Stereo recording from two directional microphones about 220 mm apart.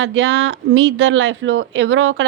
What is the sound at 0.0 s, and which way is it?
Speech, 60° right (ahead or behind).